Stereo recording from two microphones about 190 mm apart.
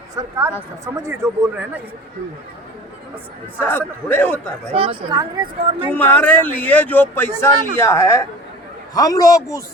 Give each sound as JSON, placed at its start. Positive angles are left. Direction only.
{"t": 0.2, "sound": "speech", "side_deg": -15}
{"t": 3.6, "sound": "speech", "side_deg": 10}
{"t": 4.7, "sound": "speech", "side_deg": -25}
{"t": 5.9, "sound": "speech", "side_deg": 10}